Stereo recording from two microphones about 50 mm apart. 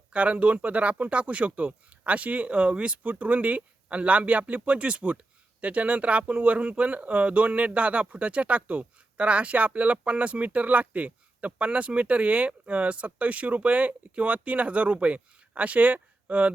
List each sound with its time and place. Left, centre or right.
0.1 s speech: right